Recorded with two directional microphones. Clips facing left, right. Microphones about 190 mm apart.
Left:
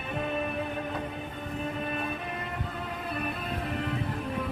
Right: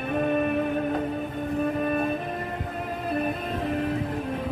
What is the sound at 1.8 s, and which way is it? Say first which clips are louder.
Music: right 8 dB; 50° right (ahead or behind).